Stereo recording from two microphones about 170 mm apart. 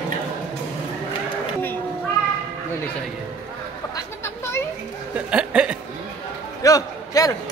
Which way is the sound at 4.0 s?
15° left (ahead or behind).